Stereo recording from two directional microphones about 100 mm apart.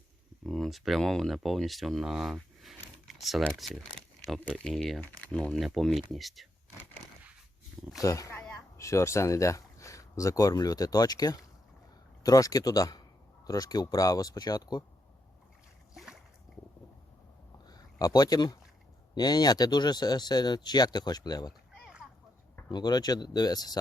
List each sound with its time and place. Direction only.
0.4 s speech: centre (ahead or behind)
3.6 s speech: 10° left (ahead or behind)
8.0 s speech: 35° left (ahead or behind)
17.7 s a sound: 40° left (ahead or behind)
19.1 s speech: 40° left (ahead or behind)
21.7 s a sound: 5° right (ahead or behind)
22.7 s speech: 45° left (ahead or behind)